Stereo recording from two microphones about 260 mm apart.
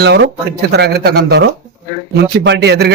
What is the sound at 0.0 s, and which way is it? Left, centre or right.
A man's voice, right.